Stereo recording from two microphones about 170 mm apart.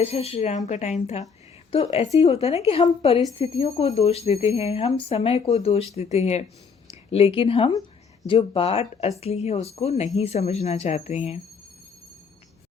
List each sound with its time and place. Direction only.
0.0 s speech: 35° left (ahead or behind)